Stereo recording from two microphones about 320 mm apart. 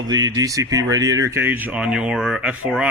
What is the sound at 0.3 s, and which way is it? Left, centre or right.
Speech, centre.